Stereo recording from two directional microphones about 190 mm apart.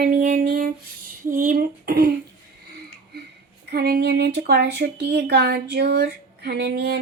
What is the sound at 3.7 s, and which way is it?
Speech, 55° right (ahead or behind).